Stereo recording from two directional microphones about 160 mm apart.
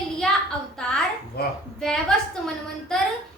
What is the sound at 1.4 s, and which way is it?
Speech, 80° left.